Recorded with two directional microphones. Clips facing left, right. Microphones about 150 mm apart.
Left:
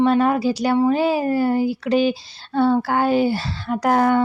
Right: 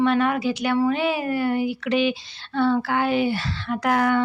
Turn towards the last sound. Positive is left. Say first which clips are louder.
# left 4 dB
turn(degrees=35)  # may be behind; listen again after turning